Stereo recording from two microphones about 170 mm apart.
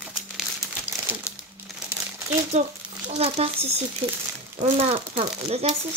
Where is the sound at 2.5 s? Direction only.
40° right (ahead or behind).